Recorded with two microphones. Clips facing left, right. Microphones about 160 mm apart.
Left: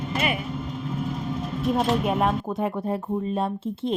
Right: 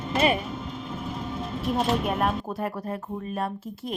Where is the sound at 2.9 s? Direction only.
25° left (ahead or behind).